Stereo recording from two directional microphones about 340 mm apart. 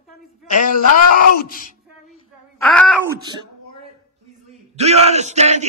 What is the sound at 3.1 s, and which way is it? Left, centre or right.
Speech, centre.